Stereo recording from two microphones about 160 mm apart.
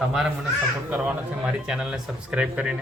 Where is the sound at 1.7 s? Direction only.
5° right (ahead or behind).